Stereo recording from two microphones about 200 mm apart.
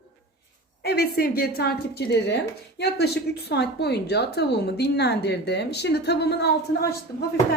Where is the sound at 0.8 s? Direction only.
55° left (ahead or behind).